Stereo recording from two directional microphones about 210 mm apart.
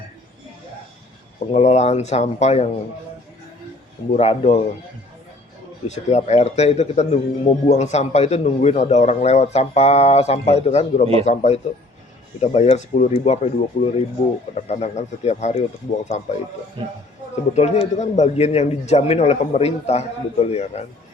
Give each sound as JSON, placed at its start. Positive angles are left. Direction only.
{"t": 1.5, "sound": "a man's voice", "side_deg": 30}
{"t": 4.1, "sound": "speech", "side_deg": 30}
{"t": 5.9, "sound": "a man's voice", "side_deg": 35}
{"t": 17.5, "sound": "a man's voice", "side_deg": 30}